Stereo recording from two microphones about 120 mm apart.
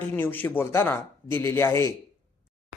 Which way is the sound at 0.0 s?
15° left (ahead or behind).